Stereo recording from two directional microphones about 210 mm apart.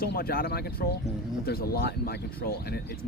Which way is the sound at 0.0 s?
45° left (ahead or behind).